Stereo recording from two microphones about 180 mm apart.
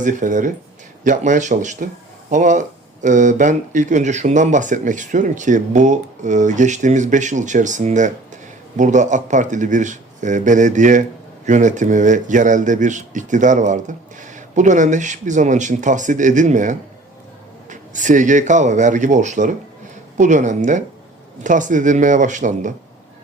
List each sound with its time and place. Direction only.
0.0 s speech: 45° right (ahead or behind)